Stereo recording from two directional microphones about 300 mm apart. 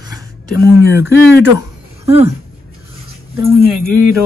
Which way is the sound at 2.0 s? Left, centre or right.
Centre.